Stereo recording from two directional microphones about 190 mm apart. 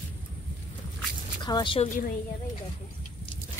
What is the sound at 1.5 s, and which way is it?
Speech, 25° left (ahead or behind).